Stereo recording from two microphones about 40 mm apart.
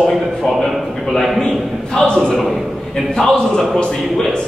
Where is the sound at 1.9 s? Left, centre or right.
Left.